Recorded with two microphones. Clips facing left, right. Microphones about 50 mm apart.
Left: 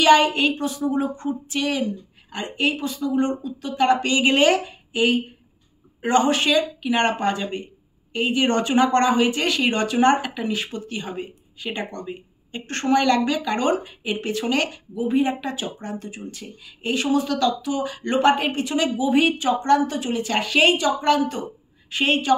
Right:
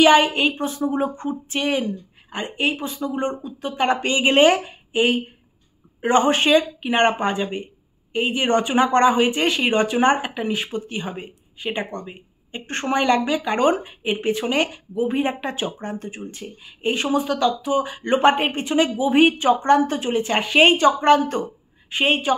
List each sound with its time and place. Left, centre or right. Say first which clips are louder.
0.0 s a woman's voice: right 1 dB; centre; by 21.4 s right
21.8 s a woman's voice: even; right